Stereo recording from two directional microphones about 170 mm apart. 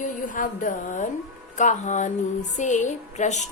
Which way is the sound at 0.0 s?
50° left (ahead or behind).